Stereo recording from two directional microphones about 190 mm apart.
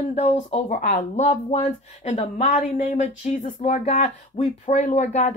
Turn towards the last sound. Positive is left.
turn(degrees=35)  # may be behind; listen again after turning